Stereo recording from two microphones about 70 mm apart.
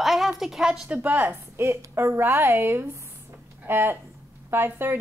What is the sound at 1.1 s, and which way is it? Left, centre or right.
Speech, right.